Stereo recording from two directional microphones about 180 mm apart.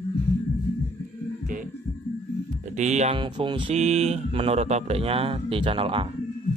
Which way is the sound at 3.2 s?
25° right (ahead or behind).